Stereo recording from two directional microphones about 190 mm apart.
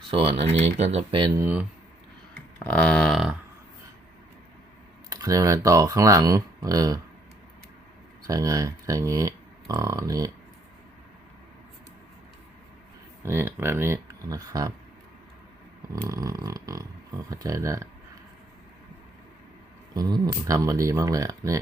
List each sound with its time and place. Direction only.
0.1 s speech: 30° right (ahead or behind)
2.3 s a sound: 5° left (ahead or behind)
5.0 s speech: 20° right (ahead or behind)
8.3 s speech: 20° right (ahead or behind)
13.2 s speech: 15° right (ahead or behind)
16.0 s speech: 20° right (ahead or behind)
19.9 s speech: 20° right (ahead or behind)